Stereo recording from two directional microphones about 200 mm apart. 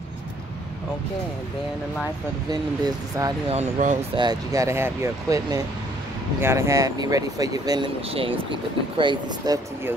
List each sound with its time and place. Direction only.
2.5 s speech: 20° right (ahead or behind)
3.5 s speech: 40° right (ahead or behind)
4.2 s speech: 20° right (ahead or behind)